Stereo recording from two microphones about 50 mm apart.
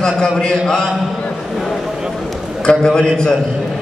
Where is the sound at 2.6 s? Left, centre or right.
Centre.